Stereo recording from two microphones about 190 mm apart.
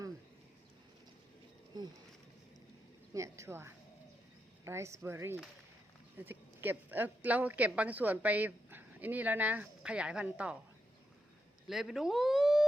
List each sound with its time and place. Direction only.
3.1 s a woman's voice: 15° right (ahead or behind)
11.7 s speech: centre (ahead or behind)